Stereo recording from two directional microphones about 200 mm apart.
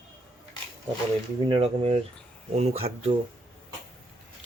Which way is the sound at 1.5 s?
25° right (ahead or behind).